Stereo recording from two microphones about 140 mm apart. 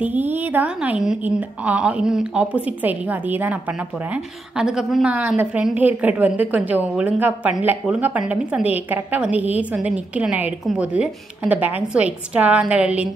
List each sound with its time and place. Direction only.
0.0 s a woman's voice: 10° right (ahead or behind)